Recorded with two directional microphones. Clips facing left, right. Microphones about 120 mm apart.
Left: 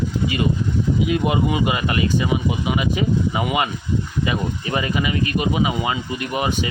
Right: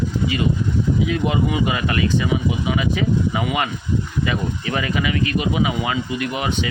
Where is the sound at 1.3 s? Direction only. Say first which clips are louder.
Even; 15° left (ahead or behind).